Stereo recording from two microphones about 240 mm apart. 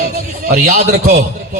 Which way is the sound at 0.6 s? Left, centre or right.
Right.